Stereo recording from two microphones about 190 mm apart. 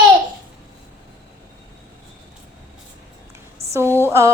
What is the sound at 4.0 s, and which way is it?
Speech, 15° right (ahead or behind).